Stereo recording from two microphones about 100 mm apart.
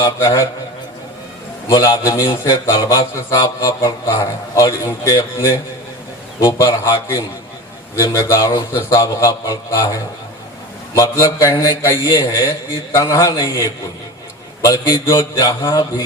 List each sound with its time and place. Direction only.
0.0 s a man's voice: 35° left (ahead or behind)
1.6 s a man's voice: 35° left (ahead or behind)
6.4 s a man's voice: 30° left (ahead or behind)
10.9 s a man's voice: 35° left (ahead or behind)